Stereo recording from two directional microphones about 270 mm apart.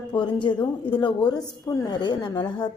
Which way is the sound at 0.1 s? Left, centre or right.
Centre.